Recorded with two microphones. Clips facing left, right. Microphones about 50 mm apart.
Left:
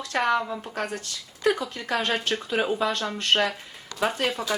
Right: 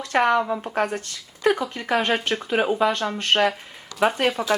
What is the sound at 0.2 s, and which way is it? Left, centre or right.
Speech, centre.